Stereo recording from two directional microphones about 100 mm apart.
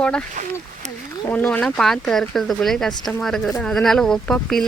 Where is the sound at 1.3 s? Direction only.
15° left (ahead or behind).